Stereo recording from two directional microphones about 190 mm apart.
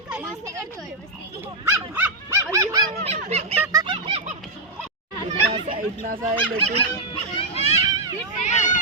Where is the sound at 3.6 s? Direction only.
20° right (ahead or behind).